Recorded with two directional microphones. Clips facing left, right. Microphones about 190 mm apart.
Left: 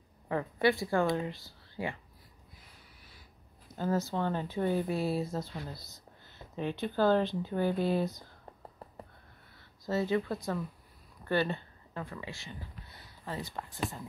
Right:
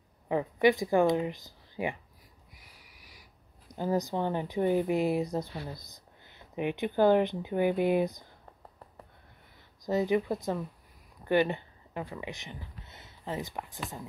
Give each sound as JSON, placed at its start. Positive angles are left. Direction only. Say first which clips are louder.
{"t": 0.3, "sound": "speech", "louder": "right 4 dB", "side_deg": -15}
{"t": 2.5, "sound": "a sound", "louder": "even", "side_deg": -10}
{"t": 5.7, "sound": "speech", "louder": "right 3 dB", "side_deg": -15}
{"t": 9.8, "sound": "speech", "louder": "right 3 dB", "side_deg": -15}